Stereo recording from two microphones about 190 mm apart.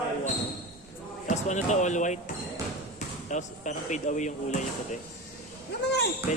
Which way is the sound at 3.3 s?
40° left (ahead or behind).